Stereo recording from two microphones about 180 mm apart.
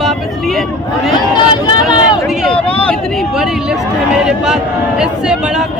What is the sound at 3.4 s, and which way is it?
A man's voice, 5° right (ahead or behind).